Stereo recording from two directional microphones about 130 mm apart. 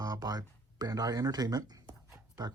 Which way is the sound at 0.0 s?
30° right (ahead or behind).